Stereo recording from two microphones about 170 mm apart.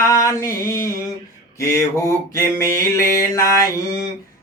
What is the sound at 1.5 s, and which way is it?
Mantra, 20° left (ahead or behind).